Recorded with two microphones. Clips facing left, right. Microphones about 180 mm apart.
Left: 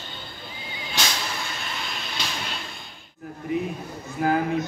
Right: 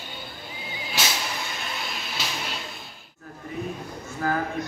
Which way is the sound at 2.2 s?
5° right (ahead or behind).